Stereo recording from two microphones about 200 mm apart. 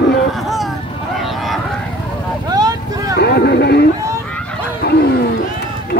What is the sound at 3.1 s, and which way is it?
Speech, 55° left (ahead or behind).